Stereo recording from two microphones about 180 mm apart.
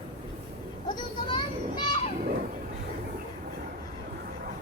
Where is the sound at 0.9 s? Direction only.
25° left (ahead or behind).